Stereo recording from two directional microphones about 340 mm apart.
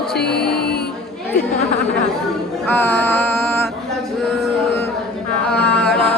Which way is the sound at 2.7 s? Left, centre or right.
Centre.